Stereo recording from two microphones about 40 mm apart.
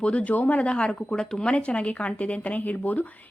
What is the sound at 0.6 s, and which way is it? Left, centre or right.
Speech, left.